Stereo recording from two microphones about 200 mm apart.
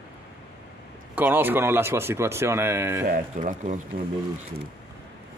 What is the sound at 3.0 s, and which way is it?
Speech, 40° right (ahead or behind).